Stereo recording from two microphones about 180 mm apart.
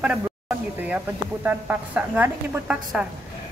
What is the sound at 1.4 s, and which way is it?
A woman's voice, 10° right (ahead or behind).